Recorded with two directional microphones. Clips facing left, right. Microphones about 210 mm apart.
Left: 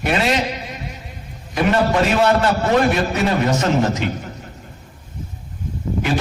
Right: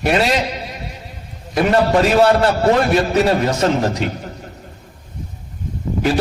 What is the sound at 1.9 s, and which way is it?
A man's voice, 35° right (ahead or behind).